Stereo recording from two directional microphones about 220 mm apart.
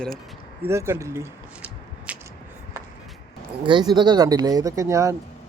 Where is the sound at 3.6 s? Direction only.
20° right (ahead or behind).